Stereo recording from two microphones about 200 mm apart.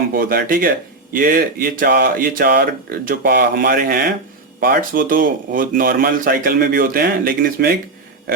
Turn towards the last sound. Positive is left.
turn(degrees=-45)  # may be behind; listen again after turning